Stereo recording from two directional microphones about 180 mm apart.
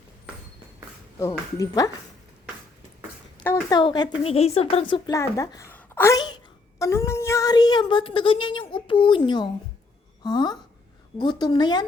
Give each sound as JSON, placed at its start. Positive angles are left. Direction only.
{"t": 1.5, "sound": "a woman's voice", "side_deg": 20}
{"t": 3.4, "sound": "a woman's voice", "side_deg": 20}